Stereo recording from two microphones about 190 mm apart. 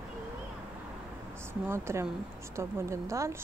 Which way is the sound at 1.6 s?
15° right (ahead or behind).